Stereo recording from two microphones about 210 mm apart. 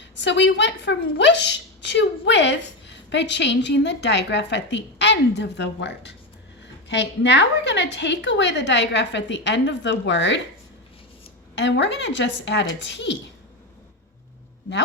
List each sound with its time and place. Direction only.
0.0 s a woman's voice: 60° left (ahead or behind)
11.5 s a woman's voice: 55° left (ahead or behind)